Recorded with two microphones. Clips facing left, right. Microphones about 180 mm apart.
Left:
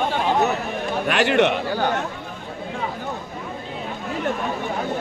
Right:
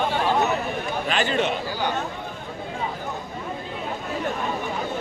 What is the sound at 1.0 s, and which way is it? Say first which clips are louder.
Speech: left 6 dB; 70° left (ahead or behind).